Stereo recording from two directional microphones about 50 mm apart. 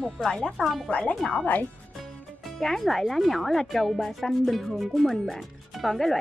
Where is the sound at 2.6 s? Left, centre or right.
Centre.